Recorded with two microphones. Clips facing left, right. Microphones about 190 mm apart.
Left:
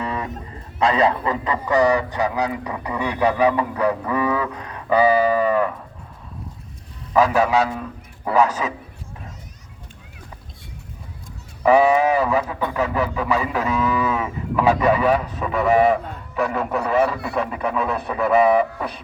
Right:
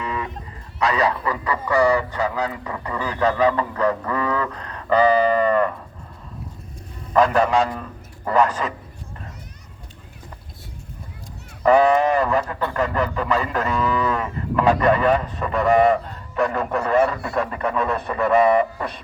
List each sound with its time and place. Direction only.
0.0 s a sound: 35° left (ahead or behind)
0.8 s a man's voice: 25° left (ahead or behind); by 5.7 s 5° left (ahead or behind)
7.1 s speech: 5° left (ahead or behind)
11.6 s speech: 5° left (ahead or behind)